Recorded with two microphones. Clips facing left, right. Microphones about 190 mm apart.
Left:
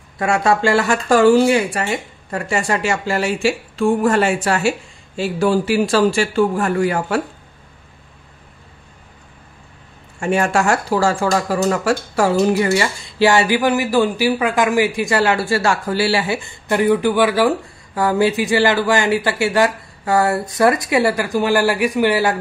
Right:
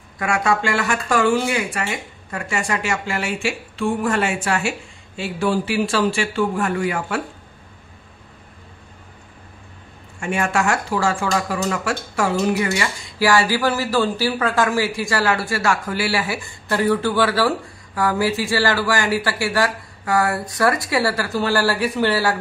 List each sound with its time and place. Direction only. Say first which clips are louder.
0.2 s speech: left 4 dB; 30° left (ahead or behind)
10.2 s speech: left 4 dB; 35° left (ahead or behind); by 22.4 s 15° left (ahead or behind)